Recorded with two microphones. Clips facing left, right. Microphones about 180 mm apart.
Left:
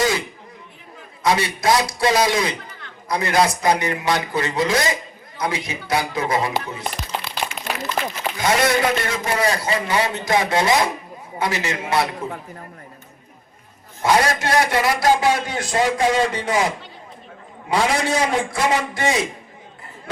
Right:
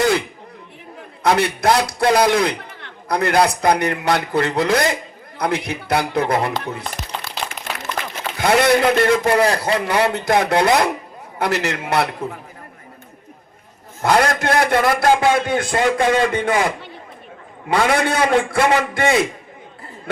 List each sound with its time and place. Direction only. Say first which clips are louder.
1.2 s a man's voice: right 3 dB; 60° right (ahead or behind)
6.6 s a sound: right 1 dB; 60° right (ahead or behind)
8.4 s a man's voice: right 4 dB; 60° right (ahead or behind)
14.0 s a man's voice: right 2 dB; 60° right (ahead or behind)